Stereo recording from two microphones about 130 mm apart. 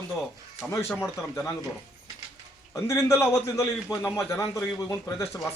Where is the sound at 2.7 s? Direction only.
25° left (ahead or behind).